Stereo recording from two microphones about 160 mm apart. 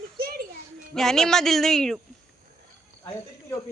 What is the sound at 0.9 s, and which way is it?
Speech, 5° left (ahead or behind).